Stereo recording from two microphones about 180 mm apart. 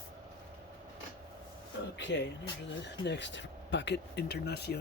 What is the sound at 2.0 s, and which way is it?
Music, 85° left.